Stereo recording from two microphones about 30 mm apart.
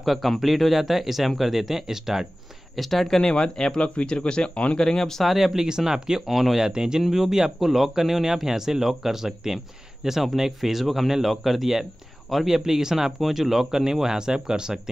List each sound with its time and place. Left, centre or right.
0.0 s speech: centre
2.7 s speech: centre
3.2 s a man's voice: left
5.2 s speech: centre
5.7 s speech: centre
6.2 s speech: centre
6.7 s speech: right; by 13.7 s centre
13.7 s speech: centre